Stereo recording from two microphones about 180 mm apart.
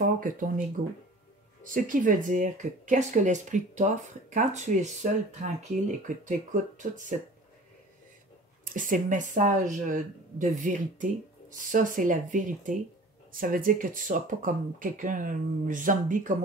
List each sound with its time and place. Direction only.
0.0 s a sound: 50° right (ahead or behind)
1.6 s speech: 45° right (ahead or behind)
8.6 s speech: 50° right (ahead or behind)